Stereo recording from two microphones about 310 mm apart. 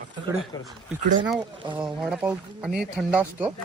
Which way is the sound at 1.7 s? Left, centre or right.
Centre.